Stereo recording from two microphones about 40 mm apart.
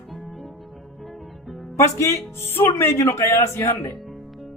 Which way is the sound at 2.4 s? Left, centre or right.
Left.